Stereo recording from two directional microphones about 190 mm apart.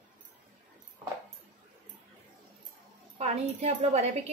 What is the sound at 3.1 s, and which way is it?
A woman's voice, 35° right (ahead or behind).